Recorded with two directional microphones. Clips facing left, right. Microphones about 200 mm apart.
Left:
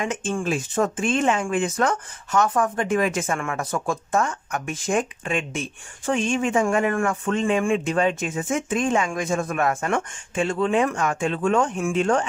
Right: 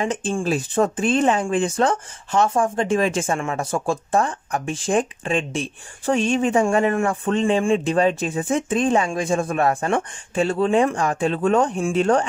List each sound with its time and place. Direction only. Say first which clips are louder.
0.0 s speech: right 3 dB; 35° right (ahead or behind)